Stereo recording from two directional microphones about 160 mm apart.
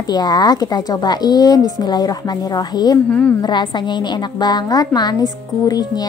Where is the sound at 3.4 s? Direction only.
25° left (ahead or behind).